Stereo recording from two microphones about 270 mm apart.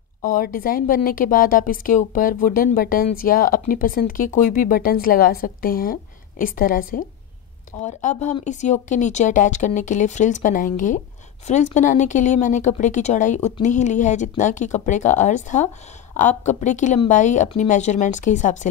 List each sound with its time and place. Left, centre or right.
0.3 s a woman's voice: left